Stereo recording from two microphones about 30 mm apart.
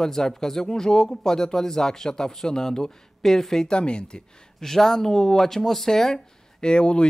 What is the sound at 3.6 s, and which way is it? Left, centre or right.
Speech, left.